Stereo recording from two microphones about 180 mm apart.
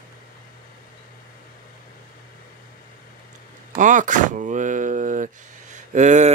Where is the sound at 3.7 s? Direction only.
45° right (ahead or behind).